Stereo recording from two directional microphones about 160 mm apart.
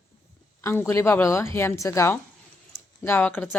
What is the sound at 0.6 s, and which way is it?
Speech, 15° left (ahead or behind).